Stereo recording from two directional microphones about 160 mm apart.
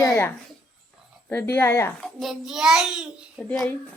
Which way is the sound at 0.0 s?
20° left (ahead or behind).